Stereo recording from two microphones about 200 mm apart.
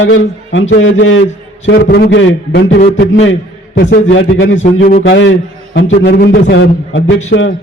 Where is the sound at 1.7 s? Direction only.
55° left (ahead or behind).